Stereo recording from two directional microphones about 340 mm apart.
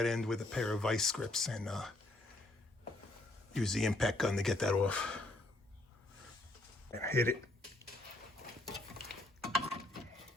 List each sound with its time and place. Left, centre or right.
0.0 s speech: centre
3.5 s speech: centre
7.0 s speech: centre
8.6 s mechanisms: centre